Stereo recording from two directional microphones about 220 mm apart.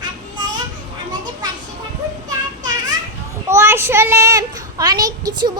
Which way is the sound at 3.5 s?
10° right (ahead or behind).